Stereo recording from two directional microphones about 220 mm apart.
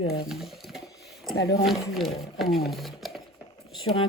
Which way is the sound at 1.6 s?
Centre (ahead or behind).